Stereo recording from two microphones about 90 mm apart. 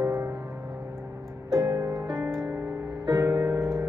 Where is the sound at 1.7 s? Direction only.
40° right (ahead or behind).